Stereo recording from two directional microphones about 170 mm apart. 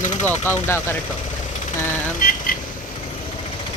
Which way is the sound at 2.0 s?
55° left (ahead or behind).